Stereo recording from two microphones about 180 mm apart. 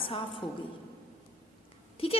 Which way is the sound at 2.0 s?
30° left (ahead or behind).